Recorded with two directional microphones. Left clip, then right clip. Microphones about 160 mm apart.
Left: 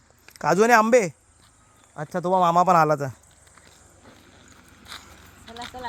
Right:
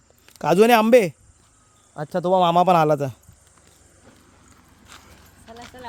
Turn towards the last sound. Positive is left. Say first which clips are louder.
# left 3 dB
turn(degrees=60)  # may be behind; listen again after turning